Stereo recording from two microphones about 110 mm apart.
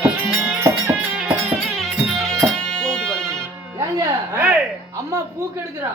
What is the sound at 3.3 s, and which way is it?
Music, 25° right (ahead or behind).